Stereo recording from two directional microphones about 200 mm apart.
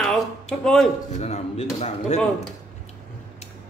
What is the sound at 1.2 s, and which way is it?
Speech, 30° left (ahead or behind).